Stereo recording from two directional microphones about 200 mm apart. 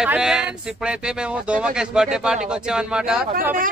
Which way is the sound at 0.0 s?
5° right (ahead or behind).